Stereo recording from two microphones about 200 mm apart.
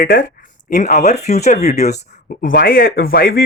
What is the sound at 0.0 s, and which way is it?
Speech, 45° left (ahead or behind).